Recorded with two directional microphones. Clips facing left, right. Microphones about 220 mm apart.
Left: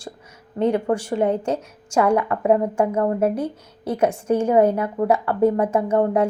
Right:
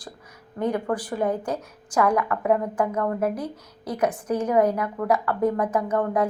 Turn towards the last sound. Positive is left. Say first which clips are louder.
# left 4 dB
turn(degrees=25)  # may be behind; listen again after turning